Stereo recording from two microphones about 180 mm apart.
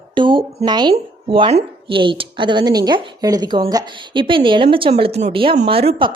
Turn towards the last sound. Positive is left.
turn(degrees=-30)  # may be behind; listen again after turning